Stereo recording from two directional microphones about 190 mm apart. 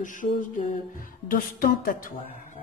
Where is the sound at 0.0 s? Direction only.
45° left (ahead or behind).